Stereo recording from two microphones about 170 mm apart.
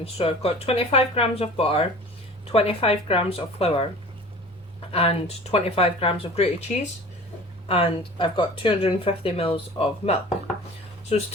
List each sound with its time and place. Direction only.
0.0 s speech: 35° left (ahead or behind)
4.9 s speech: 35° left (ahead or behind)
7.7 s speech: 30° left (ahead or behind)